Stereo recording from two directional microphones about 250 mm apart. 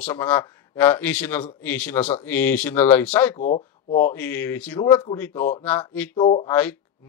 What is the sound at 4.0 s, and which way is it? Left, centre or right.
A man's voice, centre.